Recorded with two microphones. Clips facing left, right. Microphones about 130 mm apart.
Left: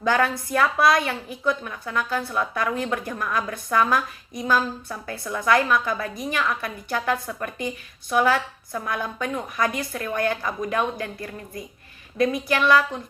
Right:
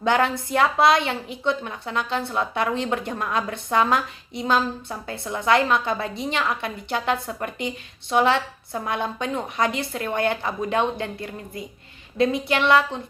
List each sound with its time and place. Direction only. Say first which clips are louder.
0.0 s a woman's voice: right 1 dB; 25° right (ahead or behind)